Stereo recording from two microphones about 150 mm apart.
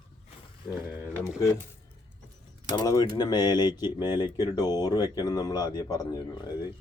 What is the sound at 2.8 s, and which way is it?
Speech, 25° left (ahead or behind).